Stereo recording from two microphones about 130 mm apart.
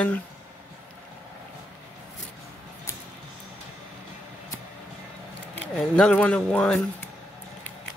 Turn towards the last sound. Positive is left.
turn(degrees=5)  # may be behind; listen again after turning